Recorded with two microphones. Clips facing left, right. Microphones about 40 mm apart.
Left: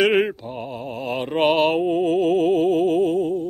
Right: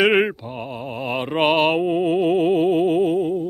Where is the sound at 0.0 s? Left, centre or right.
Centre.